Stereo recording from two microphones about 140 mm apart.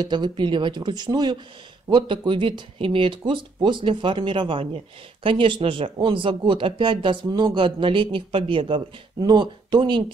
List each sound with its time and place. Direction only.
0.0 s speech: 35° right (ahead or behind)